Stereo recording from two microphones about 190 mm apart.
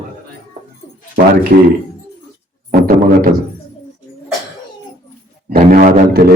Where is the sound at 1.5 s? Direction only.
55° right (ahead or behind).